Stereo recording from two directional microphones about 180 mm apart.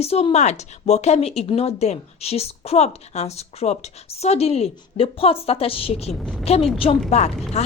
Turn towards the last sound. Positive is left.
turn(degrees=40)  # may be behind; listen again after turning